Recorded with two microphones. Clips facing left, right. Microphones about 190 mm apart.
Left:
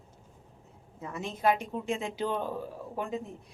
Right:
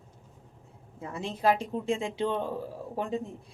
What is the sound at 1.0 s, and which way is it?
Speech, 30° right (ahead or behind).